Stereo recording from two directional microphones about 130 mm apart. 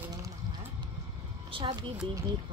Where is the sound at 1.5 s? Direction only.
40° right (ahead or behind).